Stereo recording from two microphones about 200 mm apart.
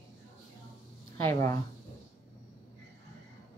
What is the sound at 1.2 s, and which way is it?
Speech, 15° left (ahead or behind).